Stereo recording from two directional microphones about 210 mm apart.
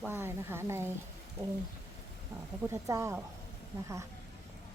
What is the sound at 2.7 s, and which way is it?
Speech, 15° right (ahead or behind).